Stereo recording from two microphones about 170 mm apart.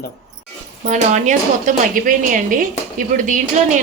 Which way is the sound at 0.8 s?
45° right (ahead or behind).